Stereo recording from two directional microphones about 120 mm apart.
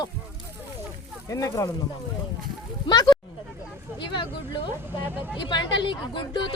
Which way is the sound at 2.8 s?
35° left (ahead or behind).